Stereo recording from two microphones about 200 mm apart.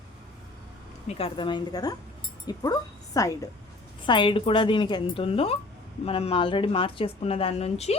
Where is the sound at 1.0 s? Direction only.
25° left (ahead or behind).